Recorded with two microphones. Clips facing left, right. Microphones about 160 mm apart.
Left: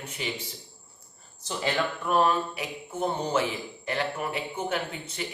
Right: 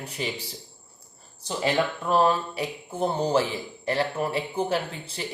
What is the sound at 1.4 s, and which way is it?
Speech, 25° right (ahead or behind).